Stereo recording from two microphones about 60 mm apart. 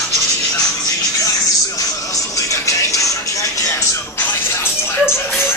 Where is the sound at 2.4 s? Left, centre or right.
Left.